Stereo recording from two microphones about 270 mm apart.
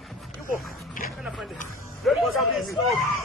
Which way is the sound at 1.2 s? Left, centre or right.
Centre.